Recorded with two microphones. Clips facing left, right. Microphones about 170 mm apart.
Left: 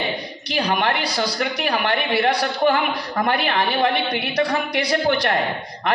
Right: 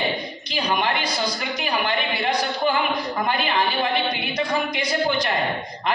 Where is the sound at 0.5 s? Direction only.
70° left (ahead or behind).